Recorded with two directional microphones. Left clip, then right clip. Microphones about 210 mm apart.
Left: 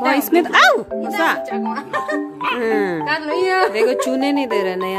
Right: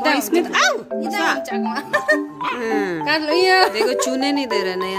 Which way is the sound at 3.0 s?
55° right (ahead or behind).